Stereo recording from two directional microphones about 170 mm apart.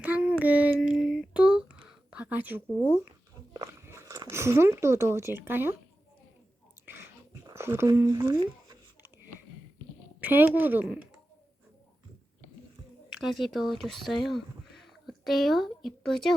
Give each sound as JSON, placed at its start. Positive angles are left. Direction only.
{"t": 0.0, "sound": "child singing", "side_deg": -5}
{"t": 3.5, "sound": "speech", "side_deg": -15}
{"t": 6.8, "sound": "a sound", "side_deg": -15}
{"t": 7.4, "sound": "speech", "side_deg": -15}
{"t": 8.6, "sound": "a sound", "side_deg": -20}
{"t": 10.2, "sound": "speech", "side_deg": -10}
{"t": 13.1, "sound": "speech", "side_deg": 0}